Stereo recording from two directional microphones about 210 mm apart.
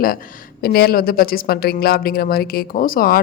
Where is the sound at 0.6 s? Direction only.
45° left (ahead or behind).